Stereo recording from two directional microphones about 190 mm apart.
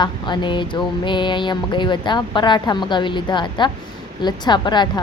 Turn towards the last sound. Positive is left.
turn(degrees=25)  # may be behind; listen again after turning